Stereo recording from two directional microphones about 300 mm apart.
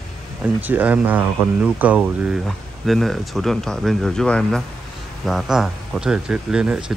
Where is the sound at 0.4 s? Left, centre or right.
Centre.